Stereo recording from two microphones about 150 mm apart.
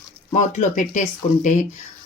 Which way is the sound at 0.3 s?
55° left (ahead or behind).